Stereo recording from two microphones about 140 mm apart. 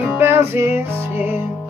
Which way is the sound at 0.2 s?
20° right (ahead or behind).